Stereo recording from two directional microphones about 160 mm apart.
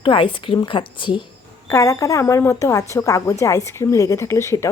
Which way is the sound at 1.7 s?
20° left (ahead or behind).